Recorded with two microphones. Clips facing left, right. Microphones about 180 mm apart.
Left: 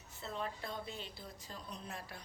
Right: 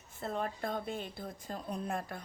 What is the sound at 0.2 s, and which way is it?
A woman's voice, 50° right (ahead or behind).